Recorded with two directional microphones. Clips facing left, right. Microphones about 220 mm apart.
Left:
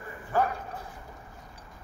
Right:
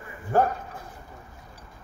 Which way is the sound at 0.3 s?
50° right (ahead or behind).